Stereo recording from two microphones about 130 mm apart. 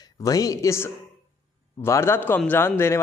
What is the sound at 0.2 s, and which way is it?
A man's voice, 25° left (ahead or behind).